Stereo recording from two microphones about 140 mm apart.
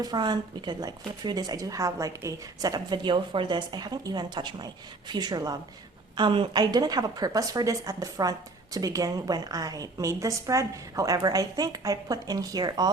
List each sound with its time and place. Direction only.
0.0 s a woman's voice: 30° right (ahead or behind)